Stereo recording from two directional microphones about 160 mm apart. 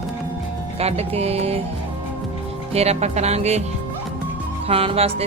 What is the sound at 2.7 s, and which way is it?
Music, 40° right (ahead or behind).